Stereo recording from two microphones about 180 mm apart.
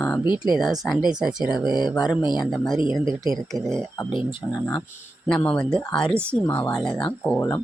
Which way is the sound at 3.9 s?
25° left (ahead or behind).